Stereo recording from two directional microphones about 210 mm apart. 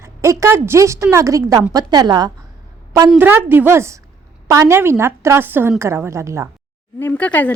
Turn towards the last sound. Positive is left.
turn(degrees=10)  # may be behind; listen again after turning